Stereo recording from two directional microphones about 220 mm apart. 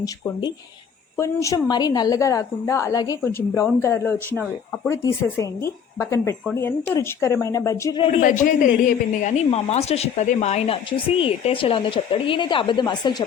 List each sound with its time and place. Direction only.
0.0 s a woman's voice: 20° left (ahead or behind)
8.2 s a woman's voice: 35° left (ahead or behind); by 13.2 s 20° left (ahead or behind)